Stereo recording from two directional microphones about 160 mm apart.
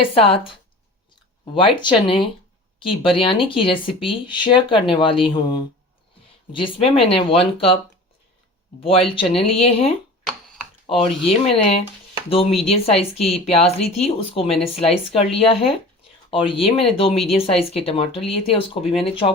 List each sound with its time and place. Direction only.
0.0 s speech: 35° left (ahead or behind)
8.8 s speech: 35° left (ahead or behind)